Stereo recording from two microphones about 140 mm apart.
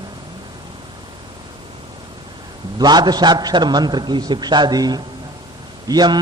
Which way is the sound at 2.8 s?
30° right (ahead or behind).